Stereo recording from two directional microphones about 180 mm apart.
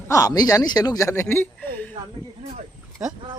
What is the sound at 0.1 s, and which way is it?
Speech, 20° left (ahead or behind).